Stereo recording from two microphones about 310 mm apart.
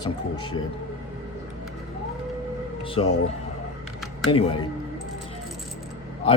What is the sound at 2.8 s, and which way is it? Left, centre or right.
Music, centre.